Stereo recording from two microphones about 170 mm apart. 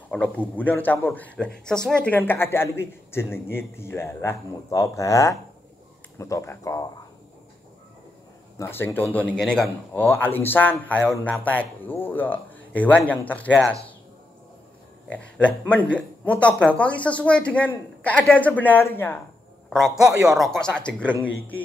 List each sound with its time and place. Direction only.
0.1 s a man's voice: 10° left (ahead or behind)
8.5 s a man's voice: 15° left (ahead or behind)
15.0 s a man's voice: 5° left (ahead or behind)
19.7 s a man's voice: centre (ahead or behind)